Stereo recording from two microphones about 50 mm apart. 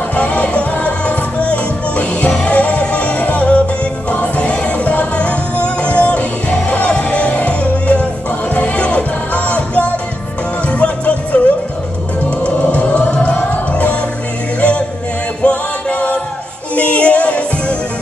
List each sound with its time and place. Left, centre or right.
0.1 s music: left
12.4 s music: left
15.4 s music: left